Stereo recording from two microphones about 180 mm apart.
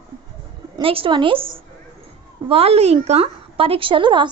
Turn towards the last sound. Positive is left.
turn(degrees=-25)  # may be behind; listen again after turning